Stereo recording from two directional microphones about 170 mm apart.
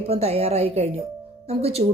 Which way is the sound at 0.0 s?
35° right (ahead or behind).